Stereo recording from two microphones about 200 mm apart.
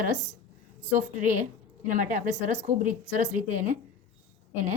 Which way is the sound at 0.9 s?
40° right (ahead or behind).